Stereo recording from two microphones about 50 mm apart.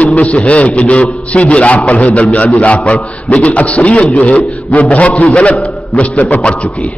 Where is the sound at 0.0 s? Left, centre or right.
Left.